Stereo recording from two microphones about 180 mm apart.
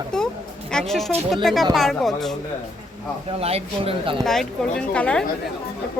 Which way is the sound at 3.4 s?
35° right (ahead or behind).